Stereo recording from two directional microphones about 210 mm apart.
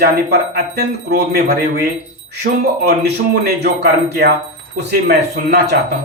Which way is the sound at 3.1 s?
50° right (ahead or behind).